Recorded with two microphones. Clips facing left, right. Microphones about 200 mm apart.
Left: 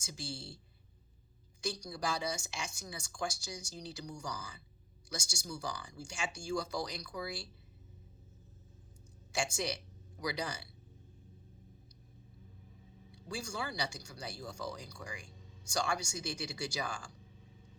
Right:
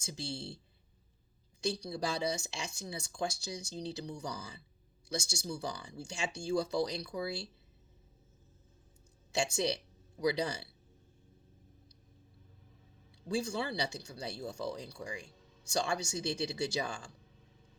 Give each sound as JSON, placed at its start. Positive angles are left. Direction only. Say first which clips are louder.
{"t": 1.6, "sound": "speech", "louder": "right 3 dB", "side_deg": -30}
{"t": 9.4, "sound": "speech", "louder": "right 4 dB", "side_deg": -30}
{"t": 13.2, "sound": "speech", "louder": "right 6 dB", "side_deg": -30}